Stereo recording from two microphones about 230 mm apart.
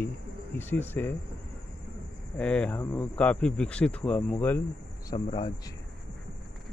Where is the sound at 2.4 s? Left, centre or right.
Centre.